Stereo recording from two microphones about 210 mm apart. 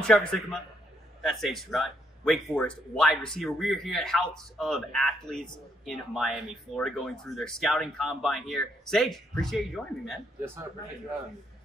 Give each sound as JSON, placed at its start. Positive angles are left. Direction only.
{"t": 0.0, "sound": "speech", "side_deg": 5}